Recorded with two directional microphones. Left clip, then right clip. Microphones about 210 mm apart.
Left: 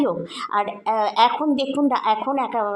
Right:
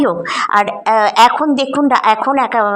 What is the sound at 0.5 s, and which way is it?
A woman's voice, 20° right (ahead or behind).